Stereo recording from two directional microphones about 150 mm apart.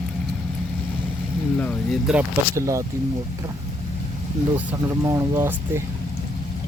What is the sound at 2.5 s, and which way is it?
Speech, 20° right (ahead or behind).